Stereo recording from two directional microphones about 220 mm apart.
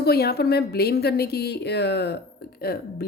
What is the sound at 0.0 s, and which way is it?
Speech, 45° left (ahead or behind).